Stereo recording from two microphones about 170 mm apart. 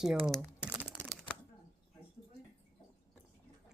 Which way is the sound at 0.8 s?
5° right (ahead or behind).